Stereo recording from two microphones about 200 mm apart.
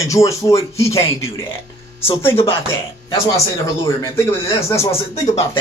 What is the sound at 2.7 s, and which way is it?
A man's voice, 15° left (ahead or behind).